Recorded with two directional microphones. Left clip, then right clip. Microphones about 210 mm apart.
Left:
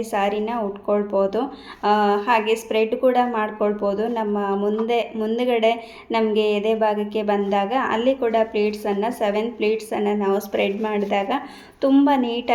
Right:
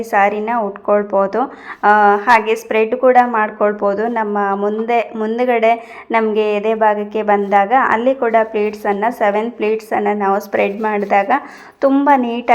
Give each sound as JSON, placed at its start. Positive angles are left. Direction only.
{"t": 0.0, "sound": "speech", "side_deg": -15}